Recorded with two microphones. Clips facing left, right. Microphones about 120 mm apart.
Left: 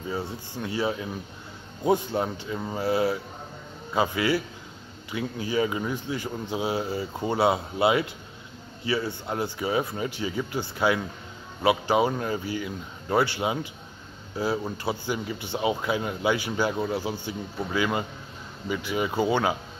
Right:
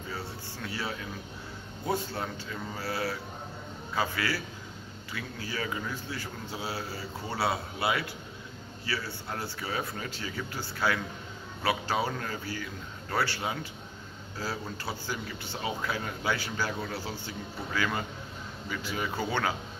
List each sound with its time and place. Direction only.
0.1 s a man's voice: 15° left (ahead or behind)